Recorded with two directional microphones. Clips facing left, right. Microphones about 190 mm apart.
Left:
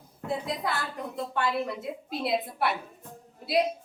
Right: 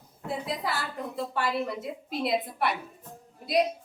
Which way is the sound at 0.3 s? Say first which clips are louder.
Left 1 dB; centre (ahead or behind).